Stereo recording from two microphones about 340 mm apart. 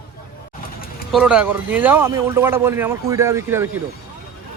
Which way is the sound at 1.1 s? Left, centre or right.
Centre.